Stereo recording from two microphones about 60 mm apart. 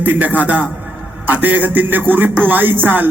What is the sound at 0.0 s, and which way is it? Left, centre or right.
A man's voice, right.